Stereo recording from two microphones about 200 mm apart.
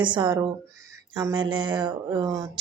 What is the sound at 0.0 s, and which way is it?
A woman's voice, 25° right (ahead or behind).